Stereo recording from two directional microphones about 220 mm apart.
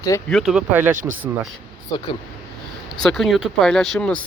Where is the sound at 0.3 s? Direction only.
Centre (ahead or behind).